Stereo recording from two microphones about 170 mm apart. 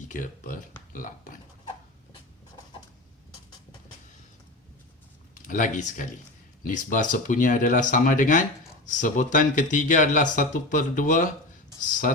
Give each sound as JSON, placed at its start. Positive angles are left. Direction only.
{"t": 0.1, "sound": "speech", "side_deg": 50}
{"t": 5.3, "sound": "speech", "side_deg": 50}